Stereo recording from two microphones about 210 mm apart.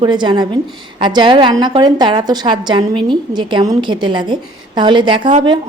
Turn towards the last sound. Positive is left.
turn(degrees=-25)  # may be behind; listen again after turning